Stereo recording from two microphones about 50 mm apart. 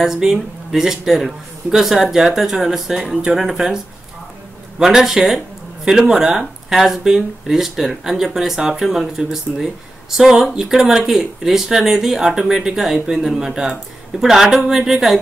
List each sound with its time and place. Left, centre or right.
0.0 s speech: centre